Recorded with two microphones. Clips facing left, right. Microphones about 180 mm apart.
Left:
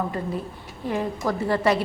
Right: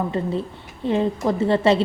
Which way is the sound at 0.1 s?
25° right (ahead or behind).